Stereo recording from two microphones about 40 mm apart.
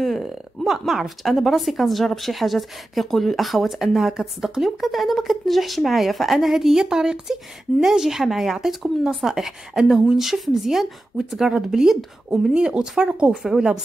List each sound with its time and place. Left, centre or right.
0.2 s a woman's voice: centre